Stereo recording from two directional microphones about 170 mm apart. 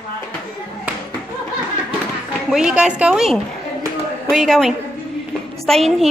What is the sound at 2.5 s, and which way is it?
A woman's voice, 5° right (ahead or behind).